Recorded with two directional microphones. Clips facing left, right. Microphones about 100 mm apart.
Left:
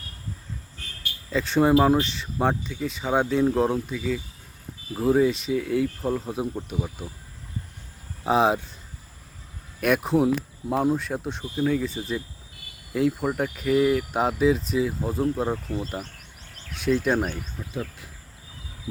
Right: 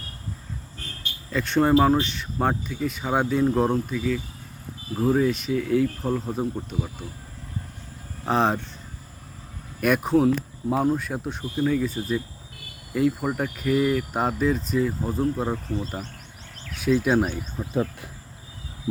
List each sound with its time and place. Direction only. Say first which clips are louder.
0.8 s a sound: right 3 dB; 35° right (ahead or behind)
1.3 s speech: even; centre (ahead or behind)
8.2 s speech: left 2 dB; 5° left (ahead or behind)
9.8 s speech: right 1 dB; centre (ahead or behind)